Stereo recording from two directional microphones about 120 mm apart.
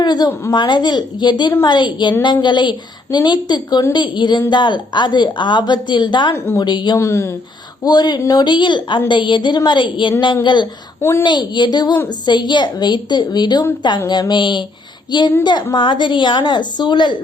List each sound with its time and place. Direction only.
0.0 s a woman's voice: 35° left (ahead or behind)
6.3 s a woman's voice: 20° left (ahead or behind)
6.6 s a woman's voice: 40° left (ahead or behind)
6.9 s a woman's voice: 25° left (ahead or behind)
7.9 s a woman's voice: 35° left (ahead or behind)
15.7 s a woman's voice: 40° left (ahead or behind)